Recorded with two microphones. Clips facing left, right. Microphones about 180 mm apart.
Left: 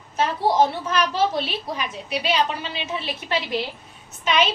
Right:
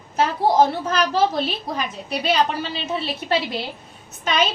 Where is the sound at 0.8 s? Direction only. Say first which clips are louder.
Right 2 dB; 45° right (ahead or behind).